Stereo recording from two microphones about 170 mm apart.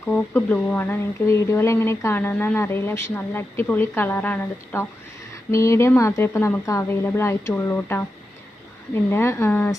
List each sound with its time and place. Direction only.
0.3 s a woman's voice: 10° left (ahead or behind)
9.0 s a woman's voice: 15° left (ahead or behind)